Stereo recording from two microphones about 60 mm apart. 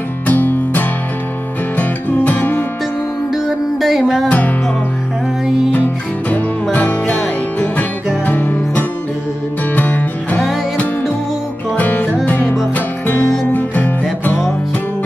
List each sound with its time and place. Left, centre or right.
0.3 s music: left
3.8 s music: centre
6.3 s music: left
8.3 s music: left
11.7 s music: left